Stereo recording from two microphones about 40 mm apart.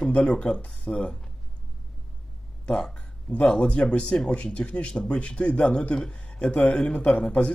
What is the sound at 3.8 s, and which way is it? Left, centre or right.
Speech, left.